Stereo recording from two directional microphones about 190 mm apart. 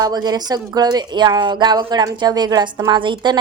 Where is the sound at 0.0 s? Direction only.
20° right (ahead or behind).